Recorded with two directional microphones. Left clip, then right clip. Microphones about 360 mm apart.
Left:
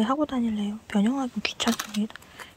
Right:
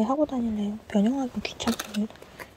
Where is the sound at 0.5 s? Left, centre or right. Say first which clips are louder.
Right 1 dB; centre.